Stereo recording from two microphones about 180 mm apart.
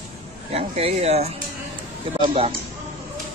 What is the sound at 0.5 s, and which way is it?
Speech, 35° right (ahead or behind).